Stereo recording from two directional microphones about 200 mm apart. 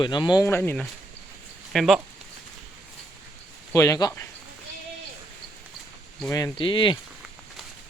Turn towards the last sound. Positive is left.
turn(degrees=25)  # may be behind; listen again after turning